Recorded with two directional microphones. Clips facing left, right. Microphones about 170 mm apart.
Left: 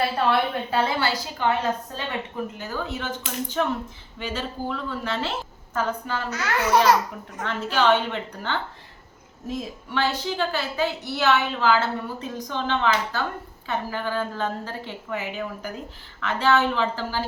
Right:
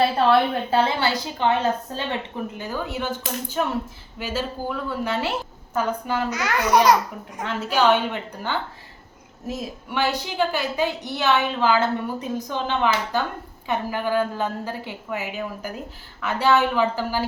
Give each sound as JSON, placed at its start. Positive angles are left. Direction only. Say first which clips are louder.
{"t": 0.3, "sound": "speech", "louder": "right 4 dB", "side_deg": -30}
{"t": 2.6, "sound": "a woman's voice", "louder": "right 2 dB", "side_deg": -10}